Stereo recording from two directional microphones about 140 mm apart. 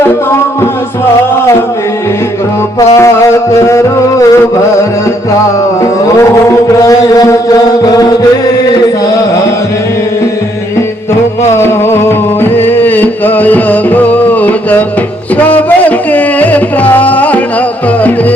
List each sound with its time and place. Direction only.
2.7 s music: 20° left (ahead or behind)
5.8 s mantra: 25° left (ahead or behind)
11.5 s music: 15° left (ahead or behind)